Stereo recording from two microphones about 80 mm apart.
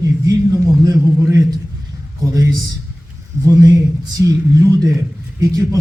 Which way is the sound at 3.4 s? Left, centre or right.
Right.